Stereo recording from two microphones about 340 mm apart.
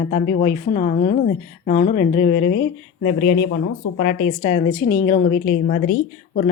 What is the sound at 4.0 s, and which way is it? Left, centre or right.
Speech, left.